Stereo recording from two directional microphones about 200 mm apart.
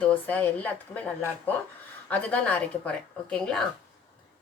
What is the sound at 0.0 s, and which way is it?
A woman's voice, 10° left (ahead or behind).